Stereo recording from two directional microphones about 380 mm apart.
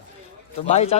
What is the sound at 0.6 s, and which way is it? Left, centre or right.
Speech, centre.